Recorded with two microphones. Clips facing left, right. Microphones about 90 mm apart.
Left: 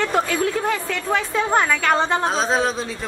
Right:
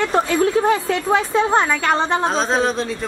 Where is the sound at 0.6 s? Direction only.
35° right (ahead or behind).